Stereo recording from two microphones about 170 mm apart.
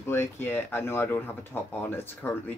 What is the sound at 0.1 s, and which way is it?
Speech, 15° left (ahead or behind).